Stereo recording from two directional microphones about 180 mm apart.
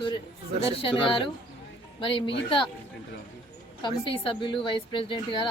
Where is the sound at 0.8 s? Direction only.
30° left (ahead or behind).